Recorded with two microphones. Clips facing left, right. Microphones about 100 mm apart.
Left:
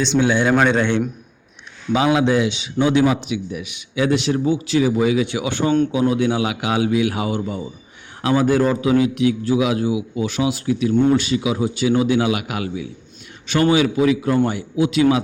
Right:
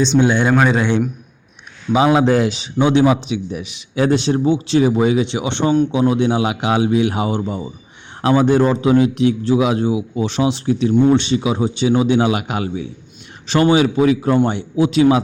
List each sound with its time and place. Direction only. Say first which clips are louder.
0.2 s a man's voice: right 1 dB; 20° right (ahead or behind)
0.5 s a man's voice: right 1 dB; 5° right (ahead or behind)
1.9 s a man's voice: right 3 dB; 30° right (ahead or behind)
2.8 s a man's voice: right 3 dB; 25° right (ahead or behind)